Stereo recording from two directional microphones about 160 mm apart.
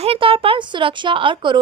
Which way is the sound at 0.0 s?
35° right (ahead or behind).